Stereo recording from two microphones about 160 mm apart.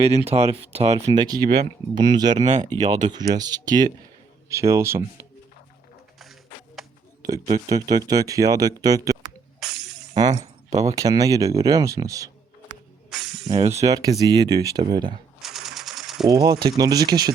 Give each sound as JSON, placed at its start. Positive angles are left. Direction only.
{"t": 0.3, "sound": "speech", "side_deg": -40}
{"t": 1.0, "sound": "speech", "side_deg": -25}
{"t": 2.4, "sound": "speech", "side_deg": -45}
{"t": 3.3, "sound": "speech", "side_deg": -25}
{"t": 6.8, "sound": "a sound", "side_deg": 0}
{"t": 7.2, "sound": "speech", "side_deg": -20}
{"t": 9.6, "sound": "music", "side_deg": 0}
{"t": 10.2, "sound": "speech", "side_deg": -25}
{"t": 13.1, "sound": "music", "side_deg": 0}
{"t": 13.6, "sound": "speech", "side_deg": -45}
{"t": 13.8, "sound": "speech", "side_deg": -20}
{"t": 15.4, "sound": "a sound", "side_deg": 0}
{"t": 16.3, "sound": "speech", "side_deg": -25}